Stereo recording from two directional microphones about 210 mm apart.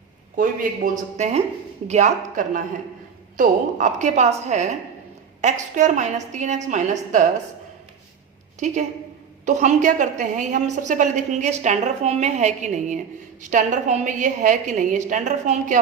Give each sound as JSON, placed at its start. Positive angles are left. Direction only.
{"t": 0.3, "sound": "a woman's voice", "side_deg": -40}
{"t": 8.5, "sound": "a woman's voice", "side_deg": -35}